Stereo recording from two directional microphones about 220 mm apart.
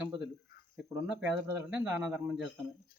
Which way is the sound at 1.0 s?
5° right (ahead or behind).